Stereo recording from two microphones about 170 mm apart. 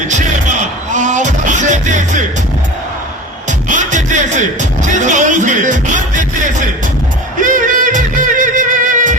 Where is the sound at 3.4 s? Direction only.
45° right (ahead or behind).